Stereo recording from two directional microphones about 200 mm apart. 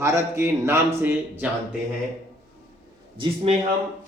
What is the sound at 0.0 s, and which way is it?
A man's voice, 15° right (ahead or behind).